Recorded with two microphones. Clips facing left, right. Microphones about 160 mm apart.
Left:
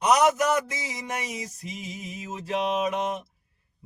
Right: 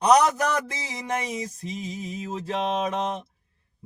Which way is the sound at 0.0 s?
35° right (ahead or behind).